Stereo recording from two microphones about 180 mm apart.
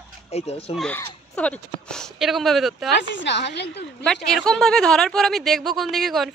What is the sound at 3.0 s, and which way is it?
Speech, 80° left.